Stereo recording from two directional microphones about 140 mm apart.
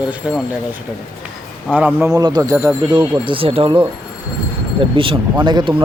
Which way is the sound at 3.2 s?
40° right (ahead or behind).